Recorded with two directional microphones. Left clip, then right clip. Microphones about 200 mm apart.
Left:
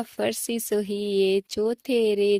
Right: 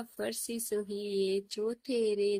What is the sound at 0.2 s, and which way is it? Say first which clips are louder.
Speech: left 10 dB; 35° left (ahead or behind).